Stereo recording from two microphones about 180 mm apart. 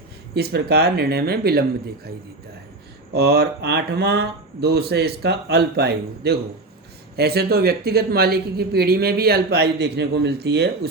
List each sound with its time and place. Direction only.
0.3 s speech: 60° right (ahead or behind)
3.2 s speech: 65° right (ahead or behind)